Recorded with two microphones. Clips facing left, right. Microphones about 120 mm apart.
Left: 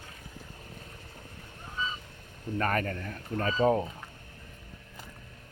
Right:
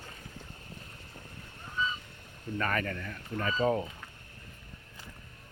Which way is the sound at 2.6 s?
40° left (ahead or behind).